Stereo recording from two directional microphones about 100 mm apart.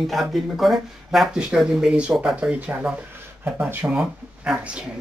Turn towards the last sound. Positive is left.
turn(degrees=-15)  # may be behind; listen again after turning